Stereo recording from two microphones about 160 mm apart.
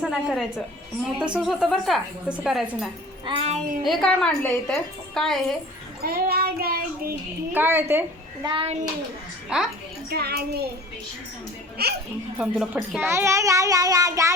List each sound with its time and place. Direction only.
0.0 s a woman's voice: 5° right (ahead or behind)
3.2 s a child's voice: 35° right (ahead or behind)
3.8 s a woman's voice: centre (ahead or behind)
6.0 s child singing: 70° right (ahead or behind)
7.5 s a woman's voice: 10° right (ahead or behind)
8.4 s a child's voice: 35° right (ahead or behind)
9.5 s a woman's voice: 5° right (ahead or behind)
10.1 s a child's voice: 80° right
11.8 s a child's voice: 80° right
12.4 s a child's voice: 5° right (ahead or behind); by 14.3 s 20° right (ahead or behind)